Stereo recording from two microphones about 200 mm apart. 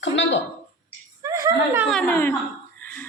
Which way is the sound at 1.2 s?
15° right (ahead or behind).